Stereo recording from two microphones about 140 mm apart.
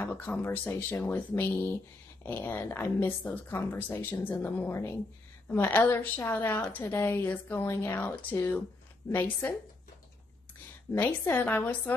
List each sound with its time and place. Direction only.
0.0 s a woman's voice: 10° left (ahead or behind)
10.9 s a woman's voice: 15° left (ahead or behind)